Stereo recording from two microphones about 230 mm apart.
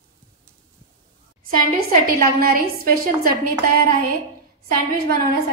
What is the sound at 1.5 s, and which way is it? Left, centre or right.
A woman's voice, right.